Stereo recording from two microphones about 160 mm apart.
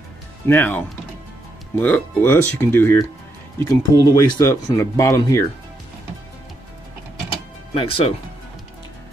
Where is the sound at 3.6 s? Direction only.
25° left (ahead or behind).